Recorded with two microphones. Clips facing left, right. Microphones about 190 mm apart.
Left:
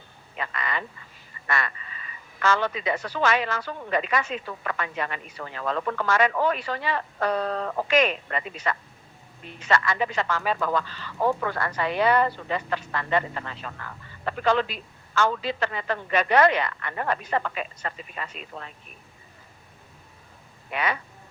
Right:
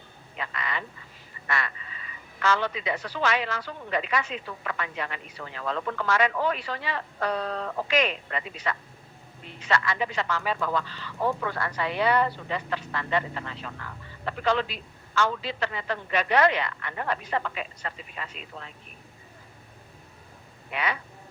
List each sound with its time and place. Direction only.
0.3 s a sound: 50° left (ahead or behind)
1.5 s a woman's voice: 50° left (ahead or behind)
20.7 s speech: 45° left (ahead or behind)